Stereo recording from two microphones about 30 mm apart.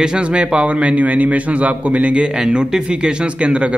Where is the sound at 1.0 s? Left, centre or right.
Right.